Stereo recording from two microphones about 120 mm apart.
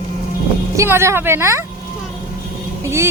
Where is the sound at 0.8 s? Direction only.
20° right (ahead or behind).